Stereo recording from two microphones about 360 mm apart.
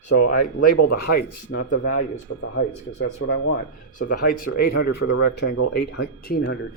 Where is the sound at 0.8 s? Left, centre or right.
Left.